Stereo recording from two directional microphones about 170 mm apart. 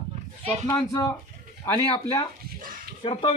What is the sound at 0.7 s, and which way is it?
Speech, 20° left (ahead or behind).